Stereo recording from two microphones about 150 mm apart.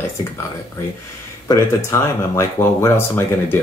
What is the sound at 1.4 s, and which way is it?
Speech, 20° left (ahead or behind).